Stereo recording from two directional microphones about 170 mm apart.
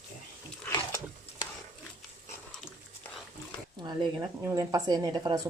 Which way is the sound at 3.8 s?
25° right (ahead or behind).